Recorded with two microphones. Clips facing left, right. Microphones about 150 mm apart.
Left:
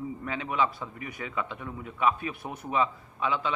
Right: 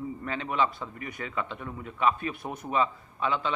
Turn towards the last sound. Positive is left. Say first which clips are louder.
# even
turn(degrees=5)  # may be behind; listen again after turning